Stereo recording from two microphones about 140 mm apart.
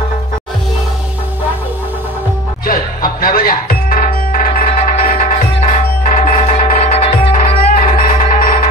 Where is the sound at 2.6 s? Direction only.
90° left.